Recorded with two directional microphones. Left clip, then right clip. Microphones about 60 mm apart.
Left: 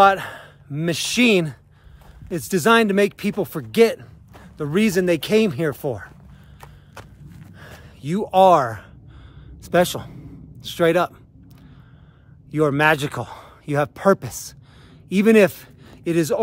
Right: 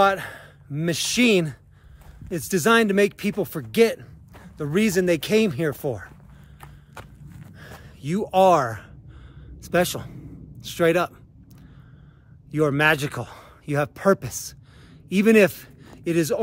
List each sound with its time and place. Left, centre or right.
0.0 s a man's voice: left
8.0 s a man's voice: left
9.6 s a sound: left
12.4 s a man's voice: left